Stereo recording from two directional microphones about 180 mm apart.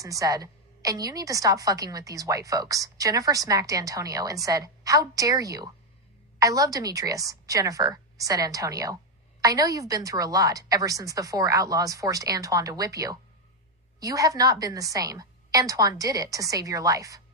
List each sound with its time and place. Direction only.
0.0 s a woman's voice: 20° right (ahead or behind)